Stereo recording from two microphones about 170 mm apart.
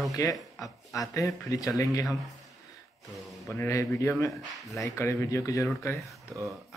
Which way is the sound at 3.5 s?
15° left (ahead or behind).